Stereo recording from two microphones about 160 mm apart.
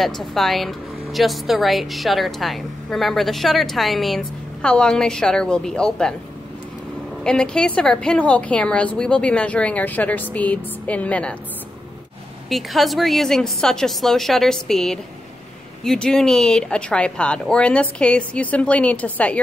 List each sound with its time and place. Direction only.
0.0 s a woman's voice: centre (ahead or behind)
7.2 s a woman's voice: 5° left (ahead or behind)
12.4 s a woman's voice: centre (ahead or behind)